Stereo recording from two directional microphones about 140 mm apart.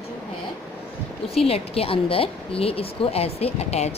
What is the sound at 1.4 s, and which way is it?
Speech, 45° left (ahead or behind).